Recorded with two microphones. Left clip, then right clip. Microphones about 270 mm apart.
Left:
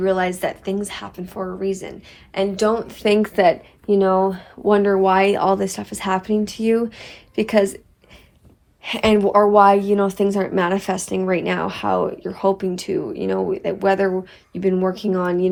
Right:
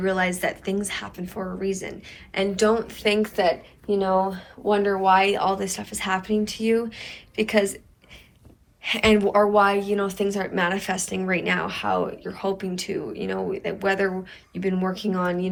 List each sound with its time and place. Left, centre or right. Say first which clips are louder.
0.0 s speech: left 4 dB; centre
8.8 s speech: left 3 dB; centre